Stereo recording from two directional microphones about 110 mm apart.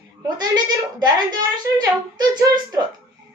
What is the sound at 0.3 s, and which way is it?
Speech, 40° right (ahead or behind).